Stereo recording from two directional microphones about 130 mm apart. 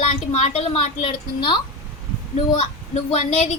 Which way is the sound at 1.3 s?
35° left (ahead or behind).